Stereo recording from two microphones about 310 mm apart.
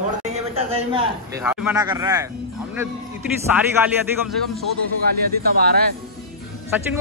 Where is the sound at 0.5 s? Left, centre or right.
Centre.